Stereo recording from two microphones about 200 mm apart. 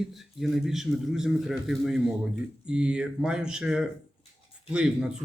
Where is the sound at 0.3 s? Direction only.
Centre (ahead or behind).